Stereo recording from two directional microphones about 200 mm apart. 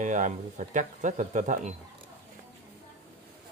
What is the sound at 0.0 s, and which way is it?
Speech, 40° right (ahead or behind).